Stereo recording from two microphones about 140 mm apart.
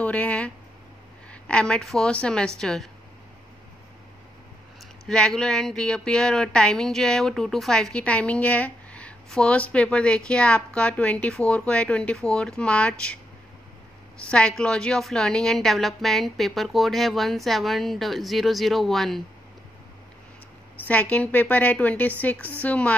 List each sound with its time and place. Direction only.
0.0 s a woman's voice: 10° left (ahead or behind)
5.0 s speech: 5° left (ahead or behind)
14.3 s a woman's voice: 5° left (ahead or behind)
20.7 s speech: 10° left (ahead or behind)